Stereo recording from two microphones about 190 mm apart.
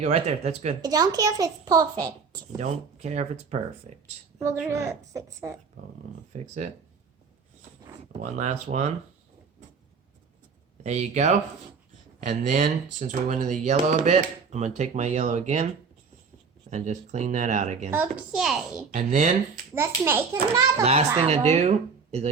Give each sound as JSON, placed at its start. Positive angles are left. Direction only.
{"t": 0.0, "sound": "speech", "side_deg": -35}
{"t": 0.8, "sound": "speech", "side_deg": -20}
{"t": 2.6, "sound": "speech", "side_deg": -35}
{"t": 4.7, "sound": "a child's voice", "side_deg": -15}
{"t": 6.3, "sound": "speech", "side_deg": -35}
{"t": 8.2, "sound": "speech", "side_deg": -40}
{"t": 10.8, "sound": "speech", "side_deg": -35}
{"t": 16.6, "sound": "speech", "side_deg": -40}
{"t": 17.9, "sound": "a woman's voice", "side_deg": -5}
{"t": 18.9, "sound": "speech", "side_deg": -40}
{"t": 19.7, "sound": "a child's voice", "side_deg": -10}
{"t": 21.2, "sound": "speech", "side_deg": -30}